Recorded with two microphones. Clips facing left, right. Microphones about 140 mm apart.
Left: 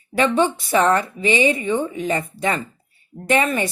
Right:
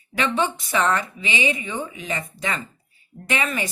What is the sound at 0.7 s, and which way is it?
Speech, 35° left (ahead or behind).